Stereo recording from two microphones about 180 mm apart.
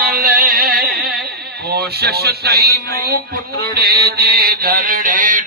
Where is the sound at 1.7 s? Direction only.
60° right (ahead or behind).